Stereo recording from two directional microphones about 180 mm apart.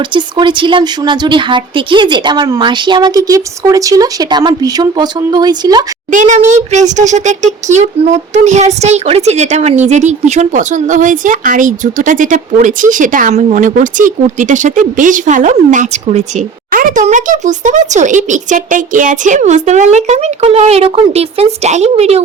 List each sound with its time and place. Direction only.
0.1 s speech: 25° right (ahead or behind)
6.1 s a child's voice: 45° right (ahead or behind)